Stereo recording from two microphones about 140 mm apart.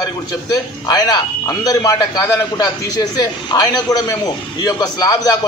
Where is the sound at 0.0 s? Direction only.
25° left (ahead or behind).